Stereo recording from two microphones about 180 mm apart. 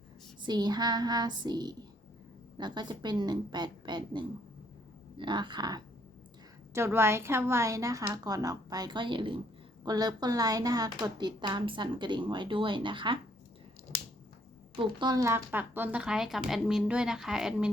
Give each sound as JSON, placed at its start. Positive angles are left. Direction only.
{"t": 0.4, "sound": "speech", "side_deg": -25}
{"t": 14.8, "sound": "speech", "side_deg": -25}